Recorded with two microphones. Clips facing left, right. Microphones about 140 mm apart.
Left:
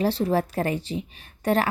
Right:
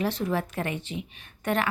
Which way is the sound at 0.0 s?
35° left (ahead or behind).